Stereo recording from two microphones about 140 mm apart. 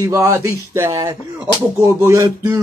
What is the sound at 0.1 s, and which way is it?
Speech, 20° right (ahead or behind).